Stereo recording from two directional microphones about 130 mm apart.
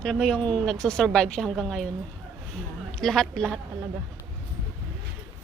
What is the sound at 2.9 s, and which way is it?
Speech, 5° left (ahead or behind).